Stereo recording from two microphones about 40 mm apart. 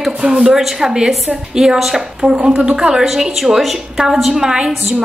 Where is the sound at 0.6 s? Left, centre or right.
Centre.